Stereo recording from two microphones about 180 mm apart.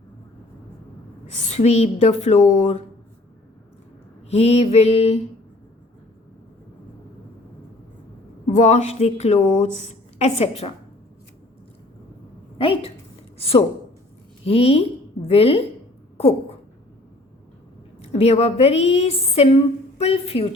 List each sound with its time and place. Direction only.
1.5 s a woman's voice: 40° left (ahead or behind)
4.3 s a woman's voice: 35° left (ahead or behind)
8.5 s a woman's voice: 40° left (ahead or behind)
12.5 s a woman's voice: 30° left (ahead or behind)
14.4 s a woman's voice: 35° left (ahead or behind)
18.0 s a woman's voice: 35° left (ahead or behind)